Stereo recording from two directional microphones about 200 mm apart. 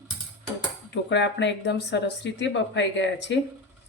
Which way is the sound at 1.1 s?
65° left (ahead or behind).